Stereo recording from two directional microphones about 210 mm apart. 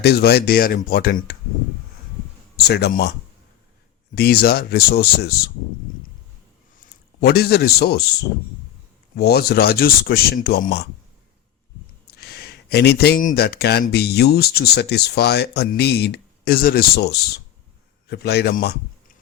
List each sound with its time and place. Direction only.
0.0 s speech: 50° left (ahead or behind)
2.6 s speech: 50° left (ahead or behind)
4.1 s speech: 45° left (ahead or behind)
7.2 s speech: 50° left (ahead or behind)
9.1 s speech: 50° left (ahead or behind)
12.0 s speech: 50° left (ahead or behind)